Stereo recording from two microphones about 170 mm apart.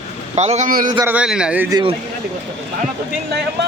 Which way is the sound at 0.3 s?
40° right (ahead or behind).